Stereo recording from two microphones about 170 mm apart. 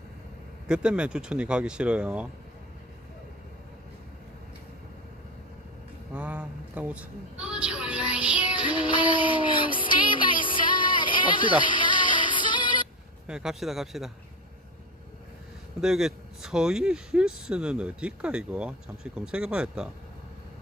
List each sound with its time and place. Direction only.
0.7 s speech: 5° right (ahead or behind)
6.1 s a sound: 10° right (ahead or behind)
8.9 s music: 30° left (ahead or behind)
13.2 s speech: 5° right (ahead or behind)
15.8 s speech: 5° right (ahead or behind)